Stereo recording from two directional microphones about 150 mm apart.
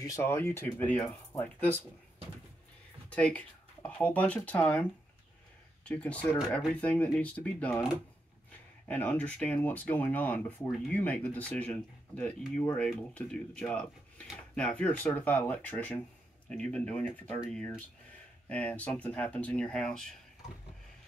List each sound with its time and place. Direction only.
0.0 s speech: 20° left (ahead or behind)
3.1 s speech: 10° left (ahead or behind)
8.8 s speech: 10° left (ahead or behind)